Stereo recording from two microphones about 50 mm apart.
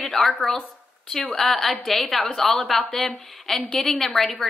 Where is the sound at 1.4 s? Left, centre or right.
Centre.